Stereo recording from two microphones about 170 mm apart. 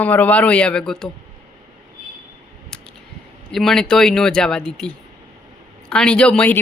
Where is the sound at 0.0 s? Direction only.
10° left (ahead or behind).